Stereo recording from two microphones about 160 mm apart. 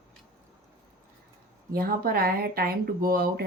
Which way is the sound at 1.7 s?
65° right (ahead or behind).